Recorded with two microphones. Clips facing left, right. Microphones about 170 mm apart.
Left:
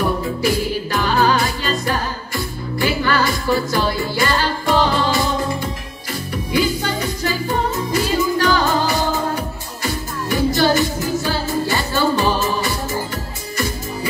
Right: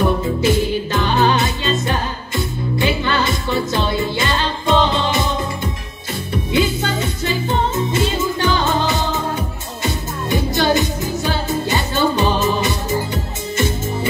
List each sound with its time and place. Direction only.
0.4 s music: 20° right (ahead or behind)
6.5 s music: 25° right (ahead or behind)